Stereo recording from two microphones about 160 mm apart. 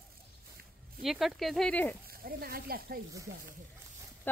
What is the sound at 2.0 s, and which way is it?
Speech, 65° right (ahead or behind).